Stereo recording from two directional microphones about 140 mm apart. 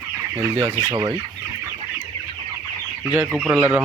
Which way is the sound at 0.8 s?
30° right (ahead or behind).